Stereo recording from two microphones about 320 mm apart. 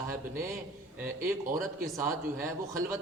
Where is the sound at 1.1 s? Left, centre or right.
Right.